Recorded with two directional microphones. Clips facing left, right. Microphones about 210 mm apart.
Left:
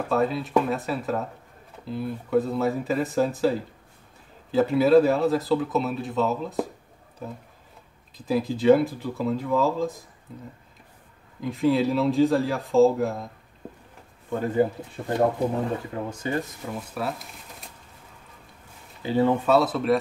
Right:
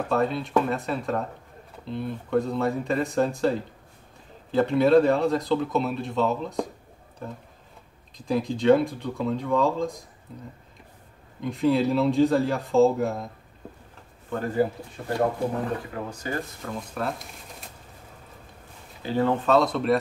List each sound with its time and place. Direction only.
0.1 s speech: centre (ahead or behind)
11.4 s speech: centre (ahead or behind)
14.3 s speech: 20° left (ahead or behind)
16.6 s speech: 5° left (ahead or behind)
19.0 s speech: 15° left (ahead or behind)